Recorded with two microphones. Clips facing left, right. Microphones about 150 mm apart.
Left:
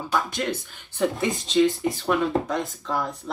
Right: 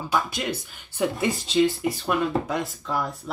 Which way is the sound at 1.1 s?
Centre (ahead or behind).